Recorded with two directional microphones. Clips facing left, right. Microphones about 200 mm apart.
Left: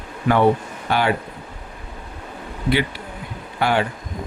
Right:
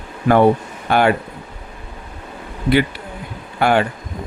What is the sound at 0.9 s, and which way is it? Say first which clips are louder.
Speech: right 5 dB; 55° right (ahead or behind).